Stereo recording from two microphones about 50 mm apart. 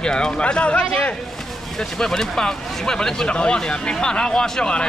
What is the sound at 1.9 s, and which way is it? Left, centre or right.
Speech, centre.